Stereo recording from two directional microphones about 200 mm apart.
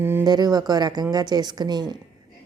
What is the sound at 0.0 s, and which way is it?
A woman's voice, 10° right (ahead or behind).